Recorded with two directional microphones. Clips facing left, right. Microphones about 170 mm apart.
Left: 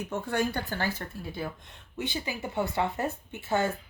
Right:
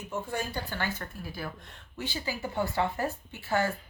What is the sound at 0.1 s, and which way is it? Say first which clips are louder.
Speech: left 3 dB; 70° left (ahead or behind).